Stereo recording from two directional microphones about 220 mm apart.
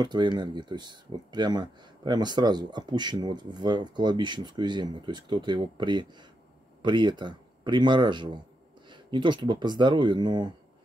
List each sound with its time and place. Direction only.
0.0 s speech: 20° right (ahead or behind)